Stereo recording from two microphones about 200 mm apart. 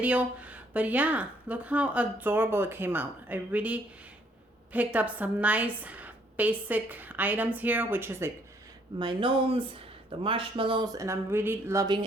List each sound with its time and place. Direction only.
0.0 s speech: 5° right (ahead or behind)
9.0 s speech: 25° right (ahead or behind)